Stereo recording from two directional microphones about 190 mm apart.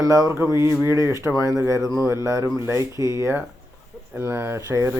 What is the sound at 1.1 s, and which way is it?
Speech, 15° right (ahead or behind).